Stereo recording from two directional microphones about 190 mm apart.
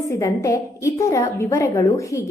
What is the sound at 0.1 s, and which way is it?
A woman's voice, 15° left (ahead or behind).